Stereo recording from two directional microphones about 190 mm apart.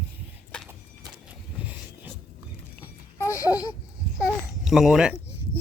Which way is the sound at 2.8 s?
15° left (ahead or behind).